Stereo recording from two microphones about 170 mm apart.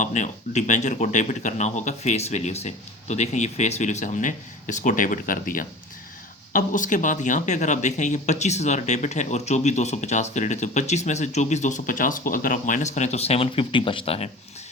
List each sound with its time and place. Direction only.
0.0 s speech: 45° left (ahead or behind)